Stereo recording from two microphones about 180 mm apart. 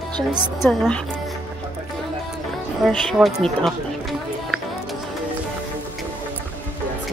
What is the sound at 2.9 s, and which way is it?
Run, centre (ahead or behind).